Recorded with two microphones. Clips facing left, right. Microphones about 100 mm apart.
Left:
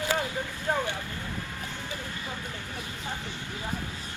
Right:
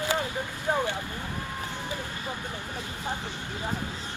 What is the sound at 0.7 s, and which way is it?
Speech, 15° right (ahead or behind).